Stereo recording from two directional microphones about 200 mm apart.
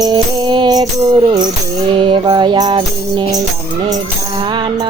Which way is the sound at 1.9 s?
25° right (ahead or behind).